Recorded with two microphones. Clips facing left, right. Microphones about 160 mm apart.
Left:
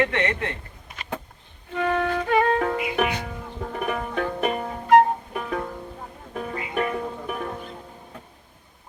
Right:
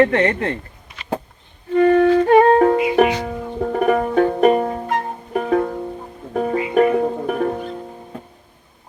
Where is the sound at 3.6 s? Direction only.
45° right (ahead or behind).